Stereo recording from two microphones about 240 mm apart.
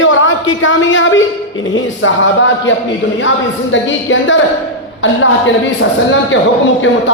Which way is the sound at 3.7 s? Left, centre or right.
Left.